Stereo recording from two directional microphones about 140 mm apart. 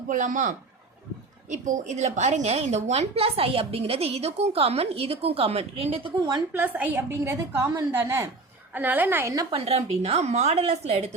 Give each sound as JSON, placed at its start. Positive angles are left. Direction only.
{"t": 0.1, "sound": "a man's voice", "side_deg": -65}
{"t": 6.5, "sound": "a woman's voice", "side_deg": -10}
{"t": 9.5, "sound": "a woman's voice", "side_deg": -45}